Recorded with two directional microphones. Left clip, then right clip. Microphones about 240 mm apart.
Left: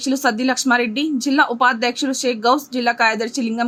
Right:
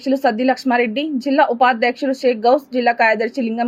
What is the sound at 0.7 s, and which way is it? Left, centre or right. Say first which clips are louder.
Speech: even; left.